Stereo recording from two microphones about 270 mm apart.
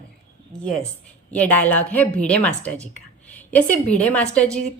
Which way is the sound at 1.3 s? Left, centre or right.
Centre.